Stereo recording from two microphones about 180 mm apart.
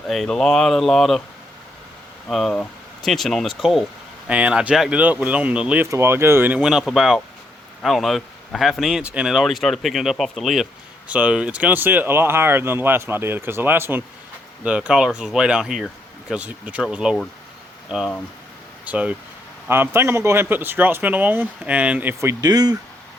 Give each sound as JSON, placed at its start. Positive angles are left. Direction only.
{"t": 0.1, "sound": "speech", "side_deg": 0}
{"t": 2.3, "sound": "speech", "side_deg": 5}